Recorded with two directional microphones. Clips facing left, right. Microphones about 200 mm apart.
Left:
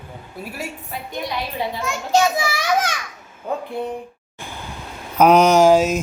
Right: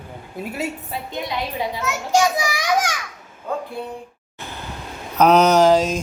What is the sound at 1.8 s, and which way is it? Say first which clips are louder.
A child's voice: left 1 dB; 10° right (ahead or behind).